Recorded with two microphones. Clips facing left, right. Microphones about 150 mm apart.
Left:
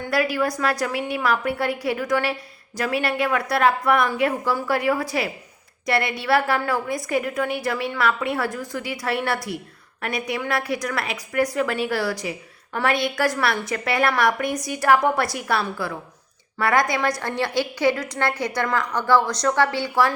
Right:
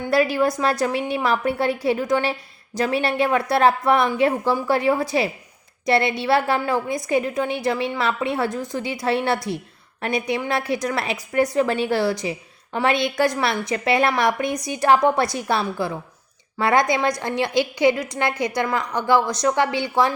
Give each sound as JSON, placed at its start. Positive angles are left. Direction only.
{"t": 0.1, "sound": "a woman's voice", "side_deg": -25}